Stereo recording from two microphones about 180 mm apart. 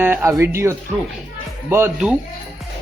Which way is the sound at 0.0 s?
10° right (ahead or behind).